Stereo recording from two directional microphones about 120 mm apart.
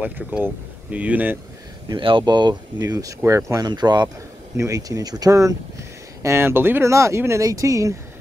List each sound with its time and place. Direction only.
0.0 s speech: 10° right (ahead or behind)
1.9 s speech: 45° right (ahead or behind); by 3.6 s 25° right (ahead or behind)
3.6 s speech: 35° right (ahead or behind)